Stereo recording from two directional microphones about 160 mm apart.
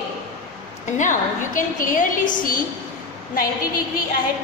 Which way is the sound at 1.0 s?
55° left (ahead or behind).